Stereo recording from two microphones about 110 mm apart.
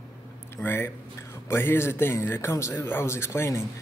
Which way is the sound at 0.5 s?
20° left (ahead or behind).